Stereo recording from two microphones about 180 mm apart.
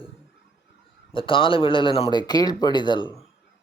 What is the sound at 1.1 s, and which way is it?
Speech, 30° left (ahead or behind).